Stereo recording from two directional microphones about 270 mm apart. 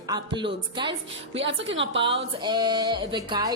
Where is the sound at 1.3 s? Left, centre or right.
Right.